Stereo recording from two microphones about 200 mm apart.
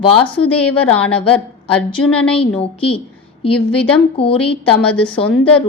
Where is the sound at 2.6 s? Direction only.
30° left (ahead or behind).